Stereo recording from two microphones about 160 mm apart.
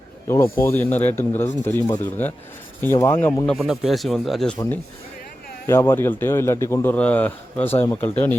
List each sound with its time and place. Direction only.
0.5 s a man's voice: 15° left (ahead or behind)
3.5 s a man's voice: centre (ahead or behind)
5.6 s a man's voice: 15° left (ahead or behind)